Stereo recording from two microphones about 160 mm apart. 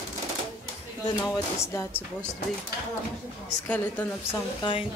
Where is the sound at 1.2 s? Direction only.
15° left (ahead or behind).